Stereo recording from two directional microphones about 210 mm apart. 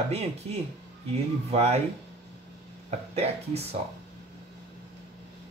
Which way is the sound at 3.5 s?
30° right (ahead or behind).